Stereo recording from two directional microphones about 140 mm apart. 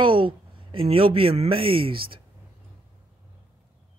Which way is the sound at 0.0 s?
40° right (ahead or behind).